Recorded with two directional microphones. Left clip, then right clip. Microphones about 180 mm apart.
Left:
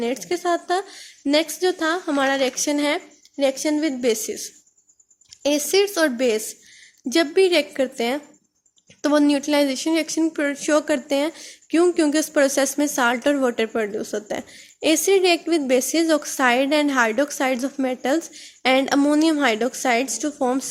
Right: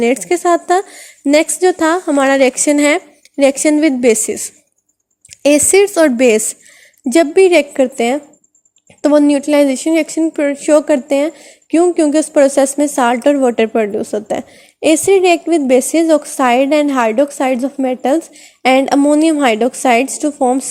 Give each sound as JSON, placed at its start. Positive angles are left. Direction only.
{"t": 0.0, "sound": "a woman's voice", "side_deg": -40}